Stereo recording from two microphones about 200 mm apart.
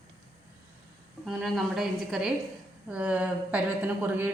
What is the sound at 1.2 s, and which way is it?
Speech, centre (ahead or behind).